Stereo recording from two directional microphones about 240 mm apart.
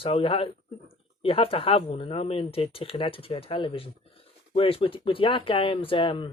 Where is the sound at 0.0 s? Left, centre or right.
Left.